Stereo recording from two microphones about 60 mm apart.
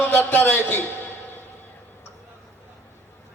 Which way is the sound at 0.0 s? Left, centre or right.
Left.